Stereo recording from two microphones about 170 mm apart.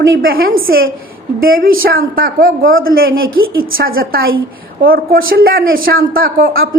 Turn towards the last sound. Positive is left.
turn(degrees=-60)  # may be behind; listen again after turning